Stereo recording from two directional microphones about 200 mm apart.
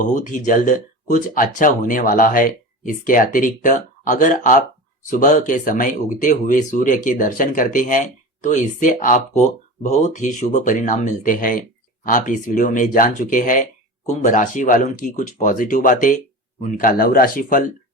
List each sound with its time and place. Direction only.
0.0 s speech: 40° left (ahead or behind)